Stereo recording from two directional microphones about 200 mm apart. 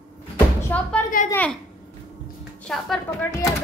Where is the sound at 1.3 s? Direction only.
5° left (ahead or behind).